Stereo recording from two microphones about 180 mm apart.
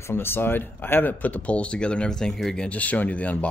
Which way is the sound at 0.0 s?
10° left (ahead or behind).